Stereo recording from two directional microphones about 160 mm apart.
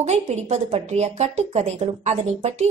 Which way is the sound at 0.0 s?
45° right (ahead or behind).